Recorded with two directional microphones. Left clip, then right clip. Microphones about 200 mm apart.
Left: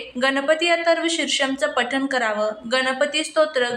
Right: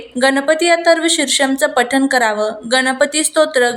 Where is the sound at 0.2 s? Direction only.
20° right (ahead or behind).